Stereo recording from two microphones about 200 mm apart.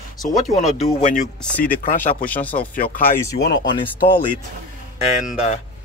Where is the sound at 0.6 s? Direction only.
40° left (ahead or behind).